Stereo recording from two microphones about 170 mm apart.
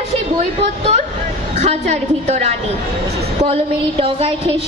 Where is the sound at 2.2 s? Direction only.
45° right (ahead or behind).